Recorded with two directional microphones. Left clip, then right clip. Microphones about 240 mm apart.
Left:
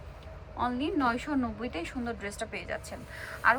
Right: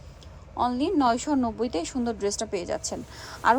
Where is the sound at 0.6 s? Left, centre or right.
Right.